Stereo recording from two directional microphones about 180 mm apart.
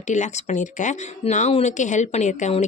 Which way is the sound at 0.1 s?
40° left (ahead or behind).